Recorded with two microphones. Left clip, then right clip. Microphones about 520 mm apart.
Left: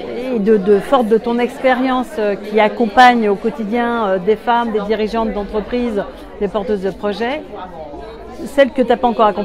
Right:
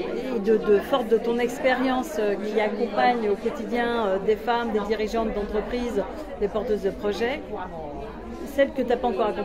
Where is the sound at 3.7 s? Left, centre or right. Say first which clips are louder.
Left 8 dB; left.